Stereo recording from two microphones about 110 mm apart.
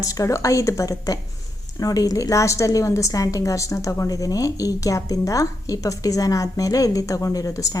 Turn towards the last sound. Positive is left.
turn(degrees=30)  # may be behind; listen again after turning